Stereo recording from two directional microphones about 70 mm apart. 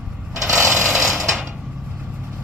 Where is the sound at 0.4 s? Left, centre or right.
Right.